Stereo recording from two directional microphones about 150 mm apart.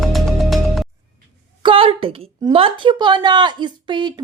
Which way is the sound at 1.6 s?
35° right (ahead or behind).